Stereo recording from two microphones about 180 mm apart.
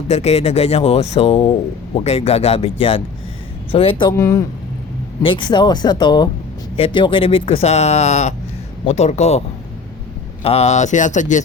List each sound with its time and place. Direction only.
0.1 s speech: 35° left (ahead or behind)
4.2 s speech: 15° left (ahead or behind)
5.2 s speech: 25° left (ahead or behind)
10.4 s speech: 35° left (ahead or behind)